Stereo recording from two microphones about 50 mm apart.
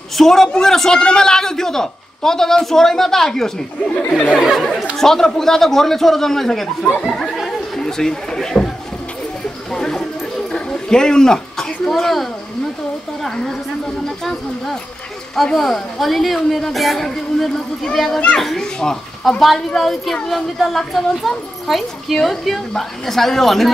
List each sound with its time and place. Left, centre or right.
0.1 s a man's voice: centre
9.7 s a sound: centre
10.7 s a man's voice: centre
19.4 s a child's voice: centre